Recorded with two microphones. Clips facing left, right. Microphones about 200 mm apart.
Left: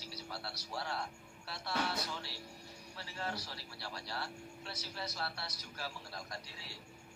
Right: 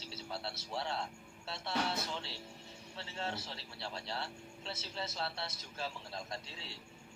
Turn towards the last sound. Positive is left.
turn(degrees=-25)  # may be behind; listen again after turning